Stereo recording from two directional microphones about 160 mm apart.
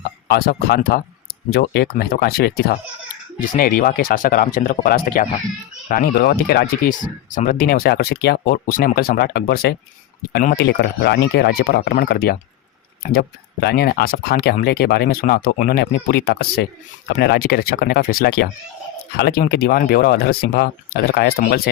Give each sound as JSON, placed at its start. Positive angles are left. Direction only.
{"t": 0.3, "sound": "speech", "side_deg": 85}
{"t": 3.4, "sound": "speech", "side_deg": 60}
{"t": 10.6, "sound": "speech", "side_deg": 90}
{"t": 17.1, "sound": "speech", "side_deg": 90}